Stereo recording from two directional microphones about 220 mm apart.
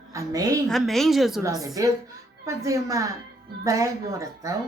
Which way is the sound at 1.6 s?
15° right (ahead or behind).